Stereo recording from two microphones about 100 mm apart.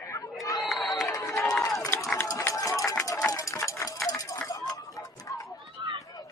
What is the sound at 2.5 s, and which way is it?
Run, 35° left (ahead or behind).